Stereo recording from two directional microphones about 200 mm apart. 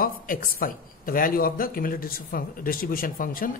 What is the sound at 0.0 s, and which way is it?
A woman's voice, 45° left (ahead or behind).